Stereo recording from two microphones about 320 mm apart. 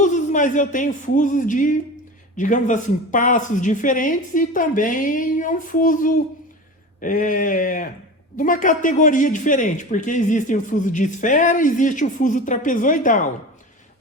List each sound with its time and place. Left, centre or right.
0.0 s speech: left